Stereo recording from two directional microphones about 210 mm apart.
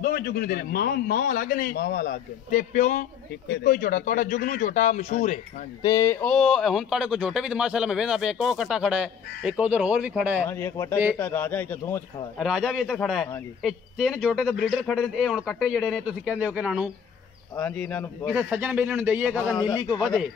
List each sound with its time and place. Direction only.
0.0 s a man's voice: 45° left (ahead or behind)
5.8 s speech: 15° left (ahead or behind); by 10.4 s 5° right (ahead or behind)
10.4 s a man's voice: 10° left (ahead or behind)
12.4 s speech: centre (ahead or behind)
17.6 s a man's voice: 5° left (ahead or behind)
18.3 s a man's voice: 5° right (ahead or behind)
19.6 s a man's voice: 20° left (ahead or behind)